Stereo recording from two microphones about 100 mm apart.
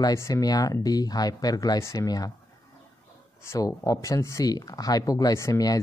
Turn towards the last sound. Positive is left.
turn(degrees=35)  # may be behind; listen again after turning